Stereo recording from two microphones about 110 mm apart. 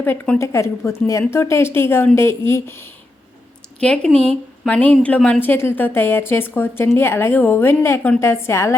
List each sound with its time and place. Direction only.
0.0 s a woman's voice: 20° left (ahead or behind)
3.8 s speech: 10° left (ahead or behind)
4.1 s a woman's voice: 65° right (ahead or behind)
4.6 s a woman's voice: 15° left (ahead or behind)